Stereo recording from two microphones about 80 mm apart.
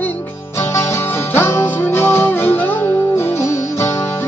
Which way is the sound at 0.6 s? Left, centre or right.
Left.